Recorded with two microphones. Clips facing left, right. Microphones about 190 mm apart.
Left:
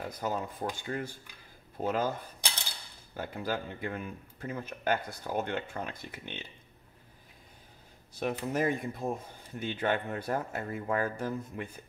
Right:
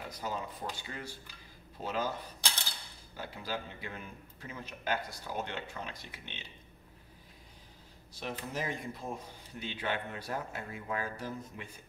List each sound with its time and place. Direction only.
0.1 s a man's voice: 50° left (ahead or behind)
8.2 s a man's voice: 55° left (ahead or behind)